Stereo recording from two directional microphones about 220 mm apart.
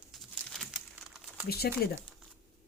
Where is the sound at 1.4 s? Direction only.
45° left (ahead or behind).